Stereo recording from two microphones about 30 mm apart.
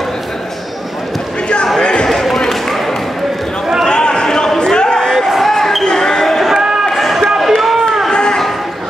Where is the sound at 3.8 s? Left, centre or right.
Left.